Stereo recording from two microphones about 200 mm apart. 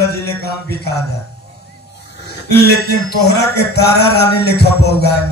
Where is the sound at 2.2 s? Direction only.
55° left (ahead or behind).